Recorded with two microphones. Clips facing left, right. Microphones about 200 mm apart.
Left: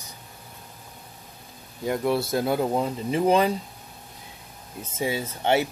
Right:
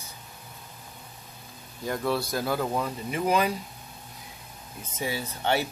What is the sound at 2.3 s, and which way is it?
Speech, 25° left (ahead or behind).